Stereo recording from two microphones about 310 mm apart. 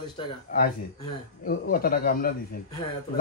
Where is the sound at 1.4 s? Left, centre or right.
Left.